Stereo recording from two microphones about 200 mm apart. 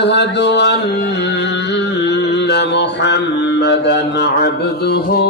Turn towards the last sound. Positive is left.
turn(degrees=55)  # may be behind; listen again after turning